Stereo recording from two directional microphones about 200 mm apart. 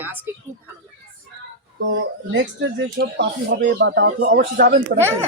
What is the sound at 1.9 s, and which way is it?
Speech, 65° right (ahead or behind).